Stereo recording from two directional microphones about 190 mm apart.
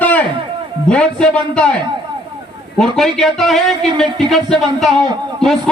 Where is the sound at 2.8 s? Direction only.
Centre (ahead or behind).